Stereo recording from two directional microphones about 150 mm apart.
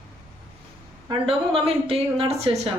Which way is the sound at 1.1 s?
40° right (ahead or behind).